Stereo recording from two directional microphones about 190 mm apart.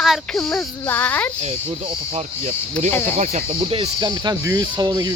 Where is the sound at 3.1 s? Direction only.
35° right (ahead or behind).